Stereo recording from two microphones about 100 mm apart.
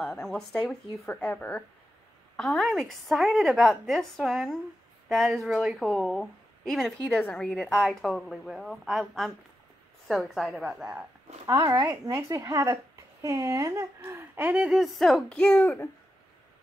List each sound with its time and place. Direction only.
0.0 s a woman's voice: 5° left (ahead or behind)
1.3 s speech: 15° left (ahead or behind)
2.3 s a woman's voice: centre (ahead or behind)
11.4 s speech: 35° right (ahead or behind)
14.6 s a woman's voice: centre (ahead or behind)